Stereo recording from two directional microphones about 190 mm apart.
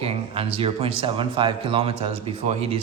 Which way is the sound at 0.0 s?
30° right (ahead or behind).